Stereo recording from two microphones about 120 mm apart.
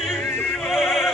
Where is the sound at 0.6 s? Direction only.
Centre (ahead or behind).